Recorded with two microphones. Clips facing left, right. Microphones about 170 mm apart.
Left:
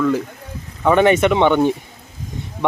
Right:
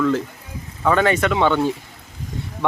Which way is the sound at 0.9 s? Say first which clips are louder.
Left 4 dB; 20° left (ahead or behind).